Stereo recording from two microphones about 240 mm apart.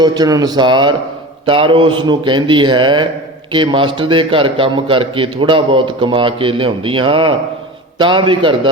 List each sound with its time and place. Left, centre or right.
0.0 s a man's voice: centre